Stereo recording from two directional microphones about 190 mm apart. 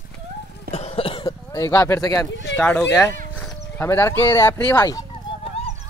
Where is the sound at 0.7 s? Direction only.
30° left (ahead or behind).